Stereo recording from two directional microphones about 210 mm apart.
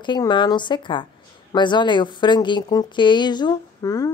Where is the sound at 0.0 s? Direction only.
20° left (ahead or behind).